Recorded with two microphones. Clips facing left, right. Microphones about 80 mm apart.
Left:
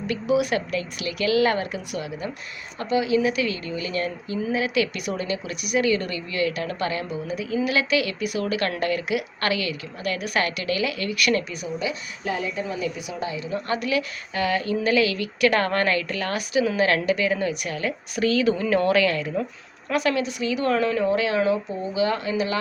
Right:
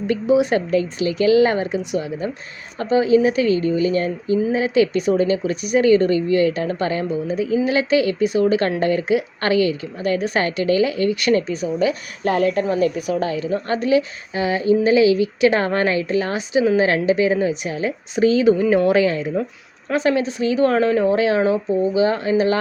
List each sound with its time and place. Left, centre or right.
0.1 s speech: right
12.2 s a woman's voice: right
13.5 s speech: right